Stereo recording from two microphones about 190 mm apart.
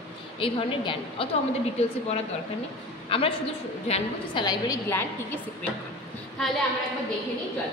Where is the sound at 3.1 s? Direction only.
30° left (ahead or behind).